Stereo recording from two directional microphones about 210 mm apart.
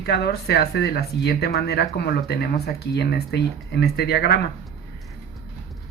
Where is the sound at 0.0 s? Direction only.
50° left (ahead or behind).